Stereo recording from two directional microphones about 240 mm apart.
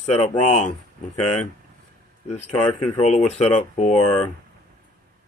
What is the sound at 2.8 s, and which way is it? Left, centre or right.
Speech, left.